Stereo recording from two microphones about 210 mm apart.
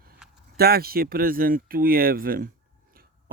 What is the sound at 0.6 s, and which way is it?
Speech, 45° right (ahead or behind).